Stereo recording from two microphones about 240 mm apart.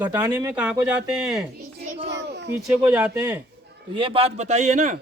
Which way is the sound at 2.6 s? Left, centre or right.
Centre.